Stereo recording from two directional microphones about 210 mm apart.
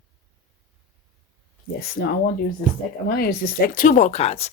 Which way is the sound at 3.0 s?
45° left (ahead or behind).